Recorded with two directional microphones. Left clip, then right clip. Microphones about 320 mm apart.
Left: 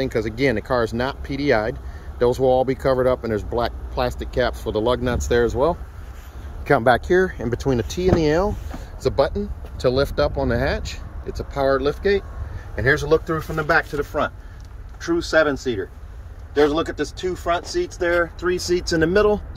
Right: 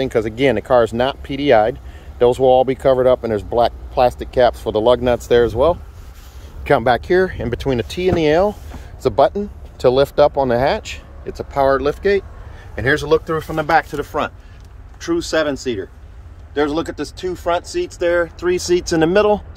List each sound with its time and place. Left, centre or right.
0.0 s speech: centre